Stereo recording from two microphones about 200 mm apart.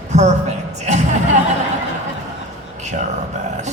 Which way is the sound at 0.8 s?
35° right (ahead or behind).